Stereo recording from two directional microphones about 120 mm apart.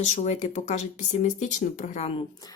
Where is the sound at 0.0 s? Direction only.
70° left (ahead or behind).